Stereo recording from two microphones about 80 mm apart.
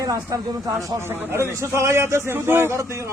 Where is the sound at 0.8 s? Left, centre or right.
Right.